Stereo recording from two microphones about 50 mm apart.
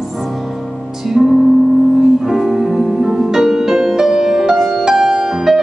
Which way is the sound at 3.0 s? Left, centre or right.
Centre.